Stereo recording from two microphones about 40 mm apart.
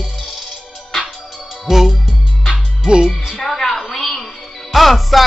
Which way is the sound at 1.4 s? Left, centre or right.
Centre.